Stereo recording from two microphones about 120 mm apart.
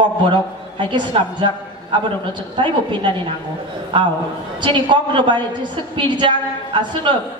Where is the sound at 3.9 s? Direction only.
45° right (ahead or behind).